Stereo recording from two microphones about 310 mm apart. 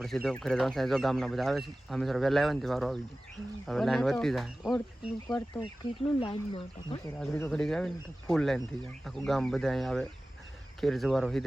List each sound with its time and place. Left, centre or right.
0.0 s speech: centre
5.5 s speech: centre
7.2 s speech: centre